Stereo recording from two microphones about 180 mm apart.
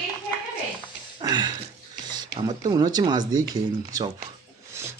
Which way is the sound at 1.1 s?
25° right (ahead or behind).